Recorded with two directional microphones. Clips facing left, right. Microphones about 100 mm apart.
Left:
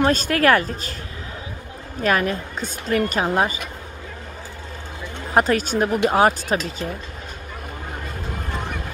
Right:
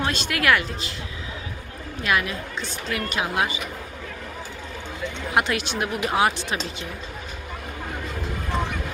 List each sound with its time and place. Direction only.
0.0 s a woman's voice: 40° left (ahead or behind)
2.0 s a woman's voice: 45° left (ahead or behind)
5.3 s a woman's voice: 40° left (ahead or behind)